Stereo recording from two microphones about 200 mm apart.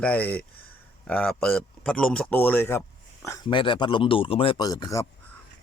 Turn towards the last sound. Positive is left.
turn(degrees=15)  # may be behind; listen again after turning